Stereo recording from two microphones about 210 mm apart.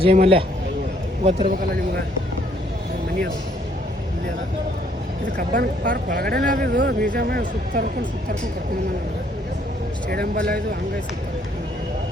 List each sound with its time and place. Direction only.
0.0 s a man's voice: 25° right (ahead or behind)
5.4 s speech: 40° right (ahead or behind)
6.7 s speech: 55° right (ahead or behind)
10.1 s speech: 45° right (ahead or behind)